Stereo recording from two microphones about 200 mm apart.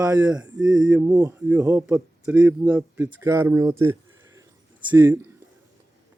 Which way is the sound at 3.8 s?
15° right (ahead or behind).